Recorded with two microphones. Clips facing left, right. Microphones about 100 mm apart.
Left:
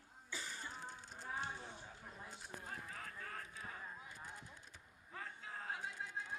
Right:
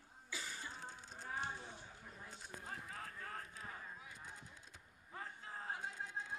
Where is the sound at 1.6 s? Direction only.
30° left (ahead or behind).